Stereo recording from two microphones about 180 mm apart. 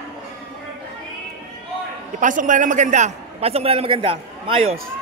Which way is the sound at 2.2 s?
45° right (ahead or behind).